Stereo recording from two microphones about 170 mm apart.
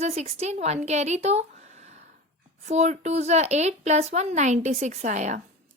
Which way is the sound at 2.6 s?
45° right (ahead or behind).